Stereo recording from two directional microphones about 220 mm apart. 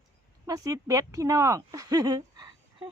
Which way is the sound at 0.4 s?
15° right (ahead or behind).